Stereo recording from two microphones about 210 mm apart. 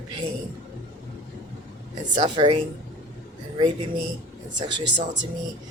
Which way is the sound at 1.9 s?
25° right (ahead or behind).